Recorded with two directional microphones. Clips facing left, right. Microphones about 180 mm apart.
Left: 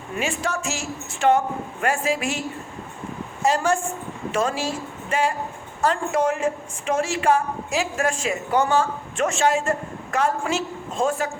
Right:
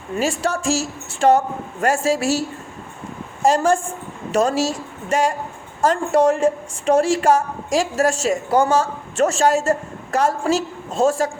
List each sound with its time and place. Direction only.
0.2 s a woman's voice: 35° right (ahead or behind)
3.4 s a woman's voice: 45° right (ahead or behind)